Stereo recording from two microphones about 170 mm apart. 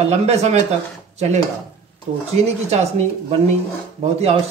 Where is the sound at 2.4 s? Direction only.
40° right (ahead or behind).